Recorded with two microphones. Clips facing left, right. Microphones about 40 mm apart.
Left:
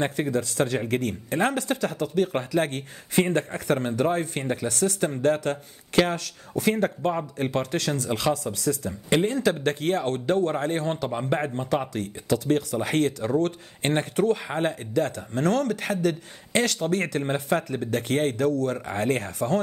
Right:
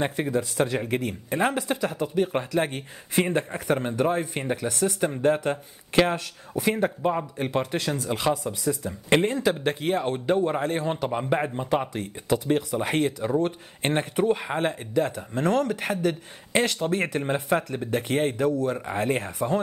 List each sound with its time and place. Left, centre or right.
0.1 s speech: centre
6.6 s speech: centre
17.3 s speech: centre